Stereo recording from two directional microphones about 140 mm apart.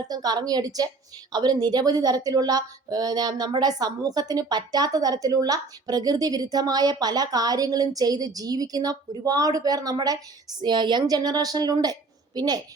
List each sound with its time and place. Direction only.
0.1 s a woman's voice: 30° right (ahead or behind)